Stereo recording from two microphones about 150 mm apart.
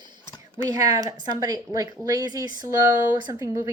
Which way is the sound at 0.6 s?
25° right (ahead or behind).